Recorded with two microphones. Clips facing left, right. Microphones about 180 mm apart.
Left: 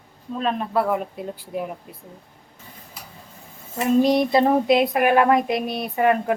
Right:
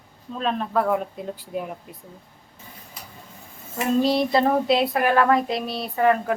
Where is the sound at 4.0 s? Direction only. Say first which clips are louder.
Left 2 dB; 15° left (ahead or behind).